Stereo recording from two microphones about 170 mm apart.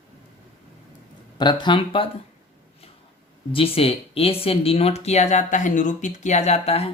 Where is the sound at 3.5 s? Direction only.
35° left (ahead or behind).